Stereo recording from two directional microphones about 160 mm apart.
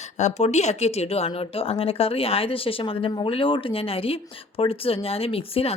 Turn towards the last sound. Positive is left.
turn(degrees=35)  # may be behind; listen again after turning